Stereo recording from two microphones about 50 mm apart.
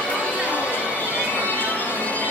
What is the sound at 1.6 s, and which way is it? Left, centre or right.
Music, left.